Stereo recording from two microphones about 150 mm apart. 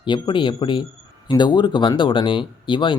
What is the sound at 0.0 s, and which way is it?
Speech, 30° left (ahead or behind).